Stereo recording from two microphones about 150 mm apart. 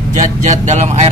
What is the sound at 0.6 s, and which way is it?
Speech, 50° right (ahead or behind).